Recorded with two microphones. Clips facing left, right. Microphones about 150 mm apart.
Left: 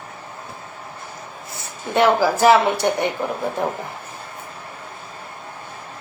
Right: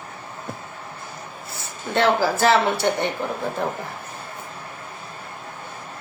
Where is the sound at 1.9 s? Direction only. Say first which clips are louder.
Left 3 dB; 15° left (ahead or behind).